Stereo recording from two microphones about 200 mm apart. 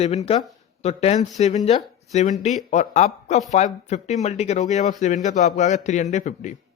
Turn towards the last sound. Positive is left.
turn(degrees=35)  # may be behind; listen again after turning